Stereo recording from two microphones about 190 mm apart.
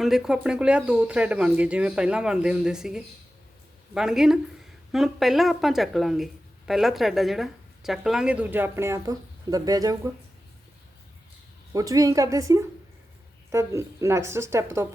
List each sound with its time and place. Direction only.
0.0 s speech: centre (ahead or behind); by 10.0 s 20° right (ahead or behind)
11.7 s speech: 20° right (ahead or behind)